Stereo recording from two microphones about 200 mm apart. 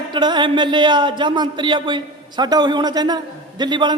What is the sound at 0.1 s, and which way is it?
Speech, 20° right (ahead or behind).